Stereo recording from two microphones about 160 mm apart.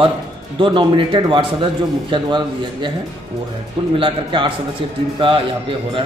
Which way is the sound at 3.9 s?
30° right (ahead or behind).